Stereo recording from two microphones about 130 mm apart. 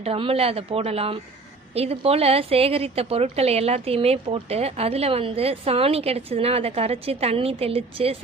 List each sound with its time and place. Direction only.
0.0 s a woman's voice: 50° right (ahead or behind)